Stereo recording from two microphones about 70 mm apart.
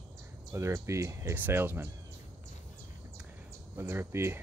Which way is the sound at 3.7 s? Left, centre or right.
Right.